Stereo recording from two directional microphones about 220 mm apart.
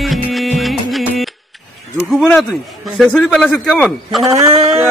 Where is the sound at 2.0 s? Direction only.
Centre (ahead or behind).